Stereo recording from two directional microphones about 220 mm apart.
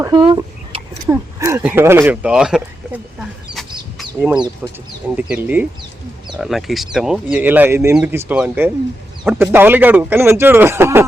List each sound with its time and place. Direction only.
0.0 s speech: 15° right (ahead or behind)
3.2 s a sound: centre (ahead or behind)
4.4 s speech: 20° right (ahead or behind)
5.1 s speech: 5° right (ahead or behind)